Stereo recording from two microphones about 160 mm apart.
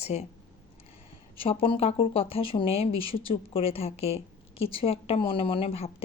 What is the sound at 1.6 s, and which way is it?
Speech, 35° left (ahead or behind).